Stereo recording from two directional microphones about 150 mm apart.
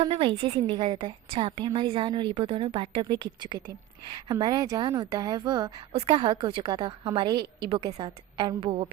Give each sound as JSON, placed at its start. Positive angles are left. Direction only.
{"t": 0.0, "sound": "a woman's voice", "side_deg": -35}
{"t": 5.9, "sound": "a woman's voice", "side_deg": -40}